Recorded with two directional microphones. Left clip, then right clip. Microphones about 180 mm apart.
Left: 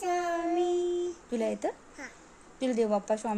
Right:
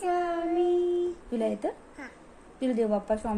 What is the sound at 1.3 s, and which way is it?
A woman's voice, 40° left (ahead or behind).